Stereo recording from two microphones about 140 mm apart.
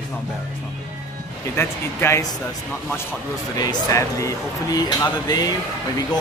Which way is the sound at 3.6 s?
25° left (ahead or behind).